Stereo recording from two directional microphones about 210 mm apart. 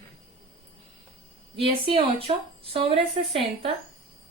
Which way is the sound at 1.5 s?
25° right (ahead or behind).